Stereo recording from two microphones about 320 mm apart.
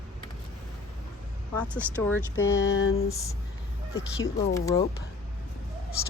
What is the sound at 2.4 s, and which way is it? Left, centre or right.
Speech, left.